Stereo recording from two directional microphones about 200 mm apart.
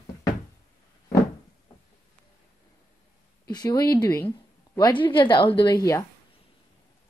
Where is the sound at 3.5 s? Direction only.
20° left (ahead or behind).